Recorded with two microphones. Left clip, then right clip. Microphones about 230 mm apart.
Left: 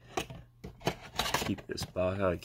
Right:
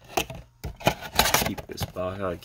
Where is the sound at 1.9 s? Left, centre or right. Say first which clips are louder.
Even; centre.